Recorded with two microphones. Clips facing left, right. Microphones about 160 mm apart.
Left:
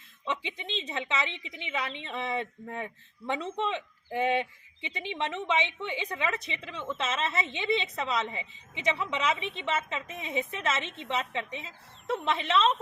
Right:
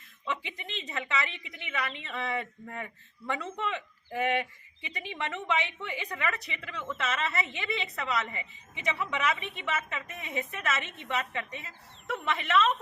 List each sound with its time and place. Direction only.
0.3 s a woman's voice: 25° left (ahead or behind)